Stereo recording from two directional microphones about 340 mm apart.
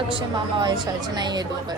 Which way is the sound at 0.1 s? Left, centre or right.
Centre.